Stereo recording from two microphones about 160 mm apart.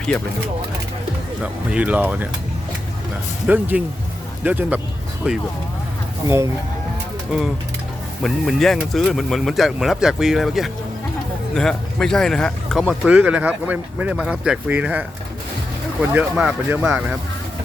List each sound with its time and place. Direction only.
1.4 s speech: 10° right (ahead or behind)
3.4 s speech: 10° right (ahead or behind)
6.2 s speech: 20° right (ahead or behind)
8.2 s speech: centre (ahead or behind)